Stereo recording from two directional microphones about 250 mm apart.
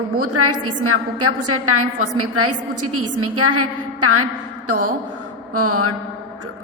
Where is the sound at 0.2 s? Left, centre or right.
Right.